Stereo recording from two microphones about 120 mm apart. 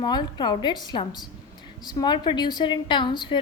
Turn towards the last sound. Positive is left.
turn(degrees=40)  # may be behind; listen again after turning